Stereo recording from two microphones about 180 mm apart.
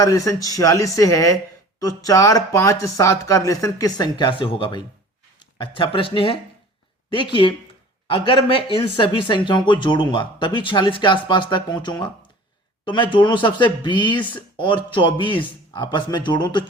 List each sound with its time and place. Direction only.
0.0 s speech: 20° left (ahead or behind)
7.1 s speech: 30° left (ahead or behind)